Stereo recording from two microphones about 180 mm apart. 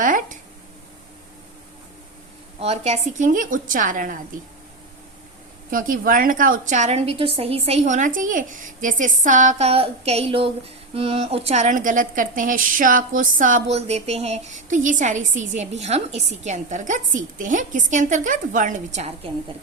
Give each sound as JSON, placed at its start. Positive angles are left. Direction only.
{"t": 0.0, "sound": "a sound", "side_deg": -50}
{"t": 2.6, "sound": "a woman's voice", "side_deg": -35}
{"t": 5.7, "sound": "a woman's voice", "side_deg": -50}